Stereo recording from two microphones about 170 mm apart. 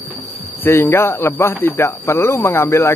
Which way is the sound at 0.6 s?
15° left (ahead or behind).